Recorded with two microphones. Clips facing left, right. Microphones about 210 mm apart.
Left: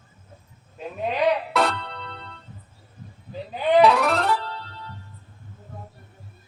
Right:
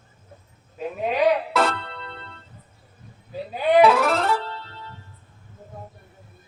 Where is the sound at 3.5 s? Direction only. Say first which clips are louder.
Right 1 dB; 10° right (ahead or behind).